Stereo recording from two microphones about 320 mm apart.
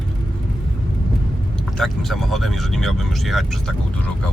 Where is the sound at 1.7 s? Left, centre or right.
Centre.